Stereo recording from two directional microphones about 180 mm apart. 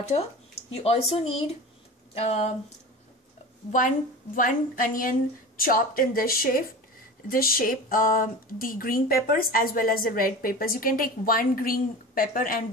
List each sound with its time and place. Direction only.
0.8 s speech: 35° left (ahead or behind)
4.4 s speech: 50° left (ahead or behind)